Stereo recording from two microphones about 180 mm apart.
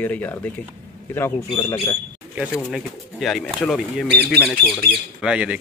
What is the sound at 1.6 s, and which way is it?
Speech, 15° left (ahead or behind).